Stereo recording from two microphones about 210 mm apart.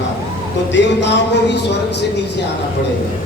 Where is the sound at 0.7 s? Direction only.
55° left (ahead or behind).